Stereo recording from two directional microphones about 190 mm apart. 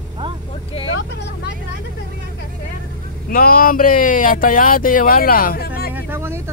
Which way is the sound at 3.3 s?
50° left (ahead or behind).